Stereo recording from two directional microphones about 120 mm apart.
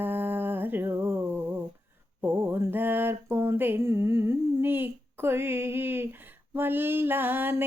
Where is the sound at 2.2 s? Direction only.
20° right (ahead or behind).